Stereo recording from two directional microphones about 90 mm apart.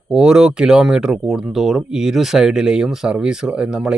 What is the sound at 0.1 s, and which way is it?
Speech, 5° right (ahead or behind).